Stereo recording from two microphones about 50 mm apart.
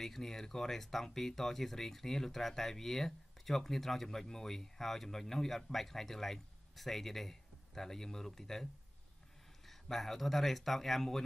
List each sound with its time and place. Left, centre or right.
0.0 s speech: centre
9.7 s speech: centre